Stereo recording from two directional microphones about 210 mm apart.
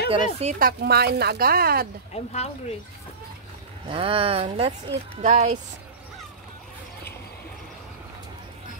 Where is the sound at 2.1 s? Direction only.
30° left (ahead or behind).